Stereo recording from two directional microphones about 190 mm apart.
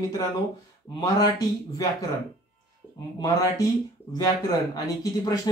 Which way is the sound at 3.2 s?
20° left (ahead or behind).